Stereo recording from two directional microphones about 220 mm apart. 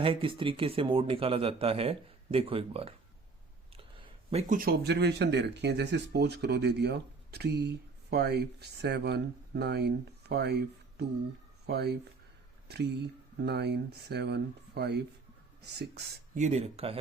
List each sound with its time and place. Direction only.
0.0 s speech: 25° right (ahead or behind); by 16.4 s 50° right (ahead or behind)
16.4 s speech: 30° right (ahead or behind)